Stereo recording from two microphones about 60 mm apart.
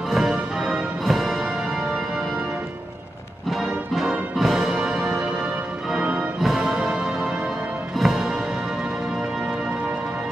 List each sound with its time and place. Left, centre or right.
0.1 s music: centre
3.4 s music: centre
6.4 s music: centre